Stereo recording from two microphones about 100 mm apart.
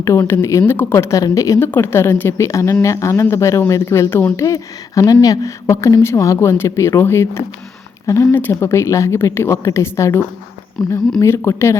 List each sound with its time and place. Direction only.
0.0 s speech: 30° left (ahead or behind)